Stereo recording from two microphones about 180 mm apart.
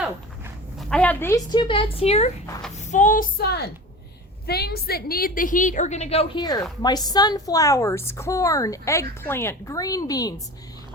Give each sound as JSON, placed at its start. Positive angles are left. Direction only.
{"t": 0.8, "sound": "a woman's voice", "side_deg": 5}
{"t": 1.5, "sound": "speech", "side_deg": 25}
{"t": 2.7, "sound": "a sound", "side_deg": 45}
{"t": 4.4, "sound": "a woman's voice", "side_deg": 60}
{"t": 6.4, "sound": "a woman's voice", "side_deg": 20}